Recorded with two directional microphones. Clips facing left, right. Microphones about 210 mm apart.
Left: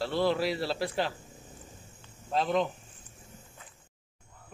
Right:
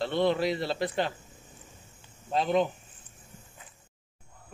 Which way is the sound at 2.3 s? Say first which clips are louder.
Right 2 dB; centre (ahead or behind).